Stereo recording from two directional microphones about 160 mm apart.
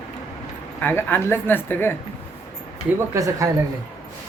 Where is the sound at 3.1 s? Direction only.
20° right (ahead or behind).